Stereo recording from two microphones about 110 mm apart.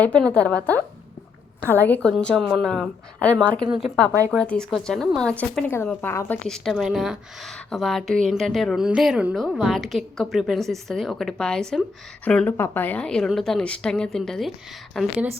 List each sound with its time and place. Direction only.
0.0 s a woman's voice: 10° left (ahead or behind)
2.2 s a woman's voice: 5° left (ahead or behind)
3.7 s a woman's voice: 5° right (ahead or behind)
4.3 s a woman's voice: 10° left (ahead or behind)
6.5 s a woman's voice: centre (ahead or behind)